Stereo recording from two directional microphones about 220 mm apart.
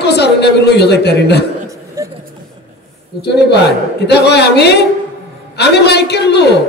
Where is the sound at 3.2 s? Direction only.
50° left (ahead or behind).